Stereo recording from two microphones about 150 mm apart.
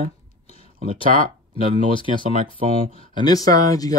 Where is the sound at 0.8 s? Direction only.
35° left (ahead or behind).